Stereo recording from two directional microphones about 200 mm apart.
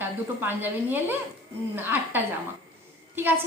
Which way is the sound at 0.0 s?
10° right (ahead or behind).